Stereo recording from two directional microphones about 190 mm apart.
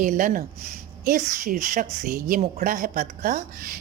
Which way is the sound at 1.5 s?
45° right (ahead or behind).